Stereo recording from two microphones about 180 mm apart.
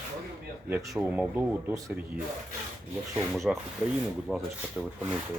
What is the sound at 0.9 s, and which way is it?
Speech, 5° right (ahead or behind).